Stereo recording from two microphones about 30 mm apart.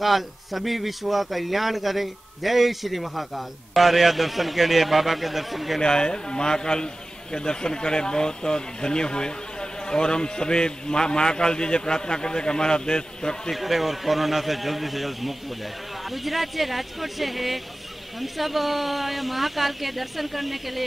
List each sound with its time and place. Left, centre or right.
0.0 s speech: centre
5.8 s speech: left
13.6 s speech: centre